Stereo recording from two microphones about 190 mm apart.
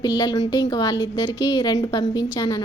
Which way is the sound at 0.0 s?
20° left (ahead or behind).